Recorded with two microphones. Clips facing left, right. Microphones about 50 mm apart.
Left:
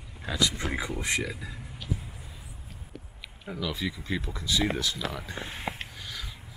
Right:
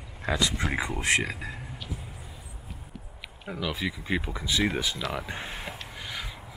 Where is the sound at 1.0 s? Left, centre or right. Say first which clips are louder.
Right 4 dB; right.